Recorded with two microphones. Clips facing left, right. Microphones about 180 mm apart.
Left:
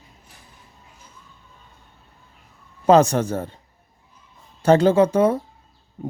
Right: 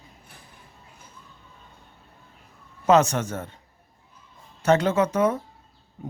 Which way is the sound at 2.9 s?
35° left (ahead or behind).